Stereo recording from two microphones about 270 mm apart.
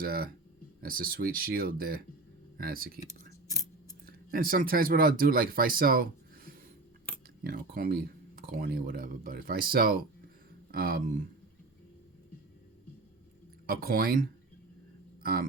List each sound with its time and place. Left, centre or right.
0.0 s speech: right
3.5 s scissors: centre
4.0 s speech: right
13.7 s speech: right